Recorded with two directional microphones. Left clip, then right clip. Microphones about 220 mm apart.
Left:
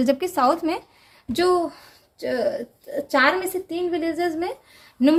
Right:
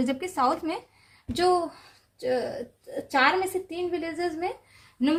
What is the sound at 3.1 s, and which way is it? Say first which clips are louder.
A woman's voice: left 3 dB; 45° left (ahead or behind).